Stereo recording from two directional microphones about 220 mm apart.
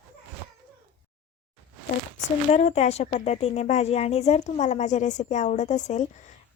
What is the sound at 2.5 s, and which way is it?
A woman's voice, 30° left (ahead or behind).